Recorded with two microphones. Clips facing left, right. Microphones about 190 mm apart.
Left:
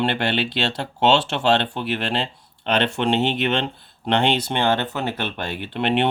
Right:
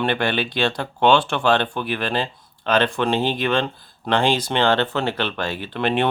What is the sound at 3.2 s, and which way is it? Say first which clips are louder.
Speech: left 1 dB; 70° left (ahead or behind).